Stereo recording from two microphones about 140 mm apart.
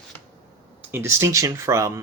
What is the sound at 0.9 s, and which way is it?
Speech, 15° right (ahead or behind).